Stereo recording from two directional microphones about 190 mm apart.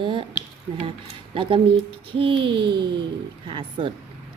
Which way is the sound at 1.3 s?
25° right (ahead or behind).